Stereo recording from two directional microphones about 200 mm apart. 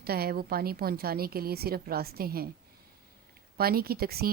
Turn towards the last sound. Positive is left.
turn(degrees=-50)  # may be behind; listen again after turning